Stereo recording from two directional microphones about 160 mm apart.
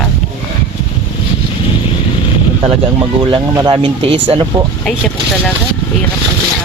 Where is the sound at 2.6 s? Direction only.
35° right (ahead or behind).